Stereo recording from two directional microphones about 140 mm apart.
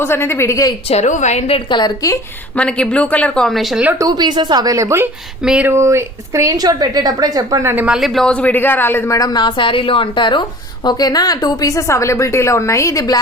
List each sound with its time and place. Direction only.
0.0 s speech: 15° left (ahead or behind)
0.9 s a woman's voice: 55° left (ahead or behind); by 2.1 s 30° left (ahead or behind)
2.6 s a woman's voice: 5° left (ahead or behind)
3.8 s a woman's voice: 25° right (ahead or behind)
5.4 s speech: 5° right (ahead or behind)
5.7 s a woman's voice: 20° right (ahead or behind)
7.9 s speech: centre (ahead or behind); by 13.1 s 25° left (ahead or behind)